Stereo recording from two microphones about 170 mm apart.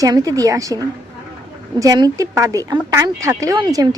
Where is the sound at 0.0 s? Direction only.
20° right (ahead or behind).